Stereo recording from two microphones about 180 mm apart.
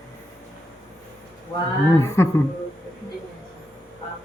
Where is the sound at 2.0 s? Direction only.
15° left (ahead or behind).